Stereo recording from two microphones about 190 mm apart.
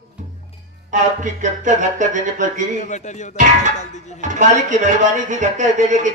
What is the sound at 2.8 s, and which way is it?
Speech, 40° left (ahead or behind).